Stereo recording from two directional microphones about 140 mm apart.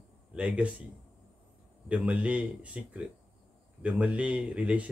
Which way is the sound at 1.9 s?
10° right (ahead or behind).